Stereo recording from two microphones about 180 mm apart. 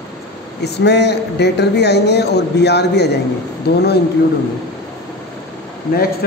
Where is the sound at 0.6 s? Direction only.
65° left (ahead or behind).